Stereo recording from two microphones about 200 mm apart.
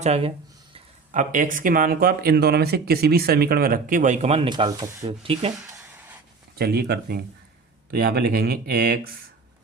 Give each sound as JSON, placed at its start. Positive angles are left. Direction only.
{"t": 0.0, "sound": "a sound", "side_deg": -30}
{"t": 1.1, "sound": "speech", "side_deg": -40}
{"t": 6.6, "sound": "speech", "side_deg": -50}